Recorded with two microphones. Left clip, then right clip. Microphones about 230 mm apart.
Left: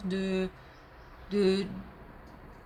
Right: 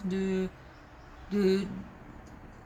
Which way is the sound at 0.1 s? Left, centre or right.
Left.